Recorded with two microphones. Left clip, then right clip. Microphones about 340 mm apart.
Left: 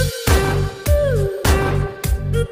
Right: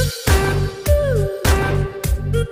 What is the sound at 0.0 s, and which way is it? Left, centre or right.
Music, centre.